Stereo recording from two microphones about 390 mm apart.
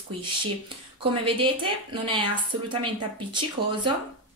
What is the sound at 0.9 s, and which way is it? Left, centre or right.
Speech, centre.